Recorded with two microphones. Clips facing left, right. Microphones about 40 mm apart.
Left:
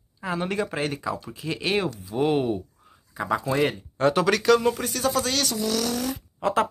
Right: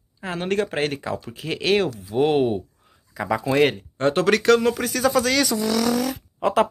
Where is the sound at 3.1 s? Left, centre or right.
Right.